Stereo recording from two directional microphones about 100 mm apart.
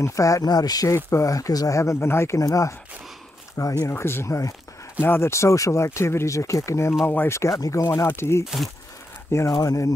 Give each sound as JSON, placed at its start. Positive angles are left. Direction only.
{"t": 0.0, "sound": "speech", "side_deg": 30}
{"t": 9.5, "sound": "speech", "side_deg": 35}